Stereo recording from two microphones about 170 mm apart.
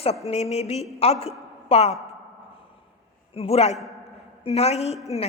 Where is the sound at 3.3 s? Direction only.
35° left (ahead or behind).